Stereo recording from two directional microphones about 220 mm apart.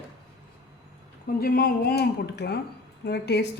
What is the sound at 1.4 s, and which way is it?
A woman's voice, 45° left (ahead or behind).